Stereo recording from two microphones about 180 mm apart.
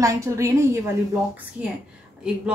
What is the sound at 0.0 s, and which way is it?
Speech, 15° right (ahead or behind).